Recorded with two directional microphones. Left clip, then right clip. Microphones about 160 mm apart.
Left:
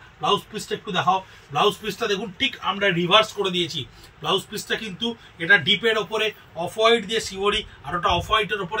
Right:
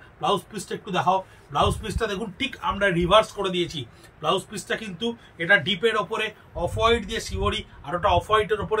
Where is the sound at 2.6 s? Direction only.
20° right (ahead or behind).